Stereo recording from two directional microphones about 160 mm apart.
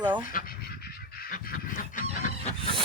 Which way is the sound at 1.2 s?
65° left (ahead or behind).